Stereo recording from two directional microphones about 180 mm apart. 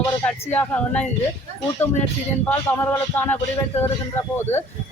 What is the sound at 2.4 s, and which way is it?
Speech, 10° left (ahead or behind).